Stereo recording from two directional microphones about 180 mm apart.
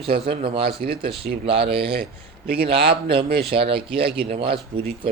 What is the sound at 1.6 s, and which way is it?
A man's voice, 65° right (ahead or behind).